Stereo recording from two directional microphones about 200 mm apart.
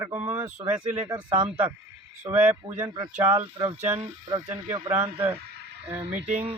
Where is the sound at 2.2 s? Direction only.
10° right (ahead or behind).